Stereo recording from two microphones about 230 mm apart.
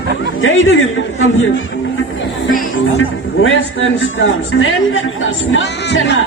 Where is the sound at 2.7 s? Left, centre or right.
Left.